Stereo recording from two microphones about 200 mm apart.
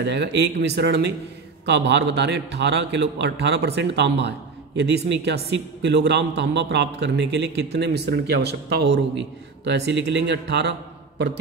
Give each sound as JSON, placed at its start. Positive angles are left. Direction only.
{"t": 0.0, "sound": "a man's voice", "side_deg": -60}